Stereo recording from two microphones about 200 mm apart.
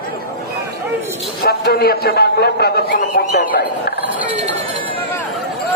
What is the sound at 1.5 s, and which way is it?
A man's voice, 50° left (ahead or behind).